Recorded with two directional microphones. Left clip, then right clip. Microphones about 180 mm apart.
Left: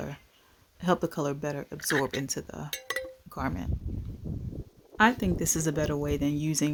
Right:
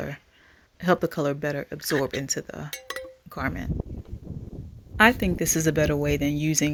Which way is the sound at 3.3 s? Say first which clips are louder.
Right 6 dB; 5° right (ahead or behind).